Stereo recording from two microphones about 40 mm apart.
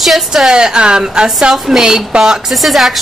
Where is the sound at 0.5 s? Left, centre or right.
Centre.